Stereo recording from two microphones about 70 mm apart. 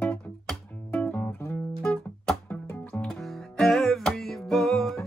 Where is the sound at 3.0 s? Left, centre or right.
Centre.